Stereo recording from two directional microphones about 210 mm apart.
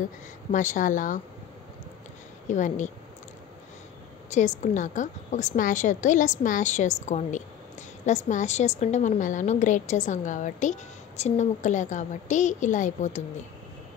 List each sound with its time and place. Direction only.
0.5 s a woman's voice: 35° left (ahead or behind)
2.4 s speech: 35° left (ahead or behind)
4.3 s a woman's voice: 35° left (ahead or behind)